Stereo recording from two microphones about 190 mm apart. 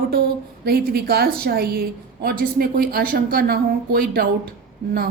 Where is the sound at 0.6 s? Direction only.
55° right (ahead or behind).